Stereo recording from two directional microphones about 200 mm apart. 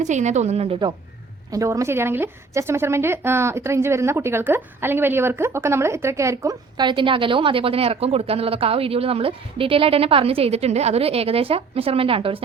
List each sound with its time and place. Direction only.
0.0 s a woman's voice: 35° right (ahead or behind)